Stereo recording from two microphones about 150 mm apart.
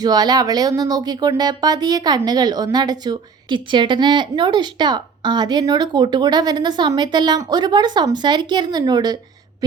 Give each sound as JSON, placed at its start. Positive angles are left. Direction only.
{"t": 0.0, "sound": "speech", "side_deg": -25}